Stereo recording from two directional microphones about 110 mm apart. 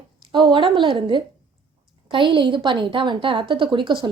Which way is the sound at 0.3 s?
45° right (ahead or behind).